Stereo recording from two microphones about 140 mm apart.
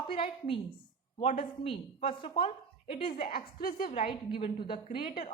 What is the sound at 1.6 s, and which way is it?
Speech, 40° left (ahead or behind).